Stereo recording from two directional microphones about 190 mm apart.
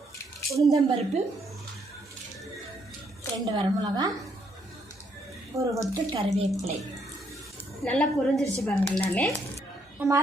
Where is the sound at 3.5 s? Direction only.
20° right (ahead or behind).